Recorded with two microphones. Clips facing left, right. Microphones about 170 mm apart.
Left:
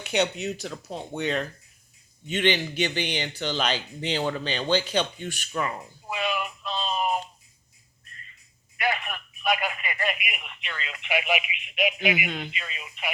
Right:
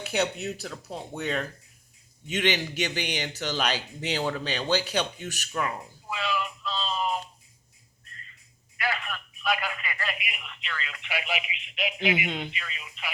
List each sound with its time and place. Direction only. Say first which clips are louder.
0.0 s a man's voice: left 2 dB; 5° right (ahead or behind)
6.1 s a sound: left 2 dB; 20° left (ahead or behind)
6.7 s music: left 3 dB; 20° left (ahead or behind)
8.8 s telephone: left 3 dB; 20° left (ahead or behind)
10.2 s a man's voice: left 2 dB; 20° left (ahead or behind)
11.9 s speech: even; 25° right (ahead or behind)
12.5 s speech: left 2 dB; 25° left (ahead or behind)